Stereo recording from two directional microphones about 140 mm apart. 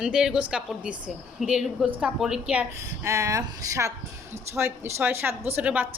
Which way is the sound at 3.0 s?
20° right (ahead or behind).